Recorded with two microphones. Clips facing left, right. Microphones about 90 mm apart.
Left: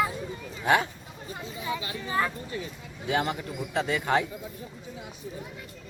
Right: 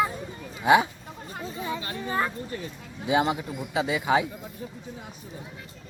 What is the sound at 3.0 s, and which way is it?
Speech, 15° right (ahead or behind).